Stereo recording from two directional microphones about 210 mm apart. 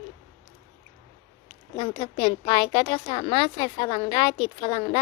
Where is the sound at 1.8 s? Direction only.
25° left (ahead or behind).